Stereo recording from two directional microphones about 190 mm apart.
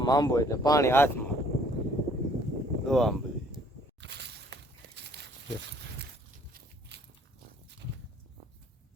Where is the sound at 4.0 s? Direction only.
60° right (ahead or behind).